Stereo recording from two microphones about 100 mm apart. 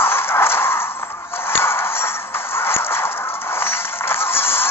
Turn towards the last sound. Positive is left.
turn(degrees=25)  # may be behind; listen again after turning